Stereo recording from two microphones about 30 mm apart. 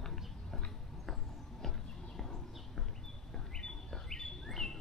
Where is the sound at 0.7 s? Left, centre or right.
Centre.